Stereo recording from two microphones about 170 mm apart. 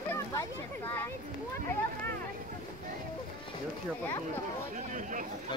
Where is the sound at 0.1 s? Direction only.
15° left (ahead or behind).